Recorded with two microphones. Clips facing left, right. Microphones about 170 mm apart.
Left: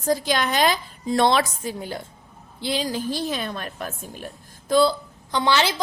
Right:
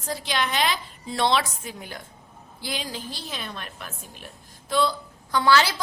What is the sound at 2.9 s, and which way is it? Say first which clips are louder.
A woman's voice: left 10 dB; 45° left (ahead or behind).